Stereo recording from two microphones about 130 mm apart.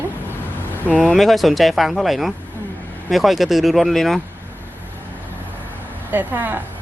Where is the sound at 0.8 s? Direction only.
10° left (ahead or behind).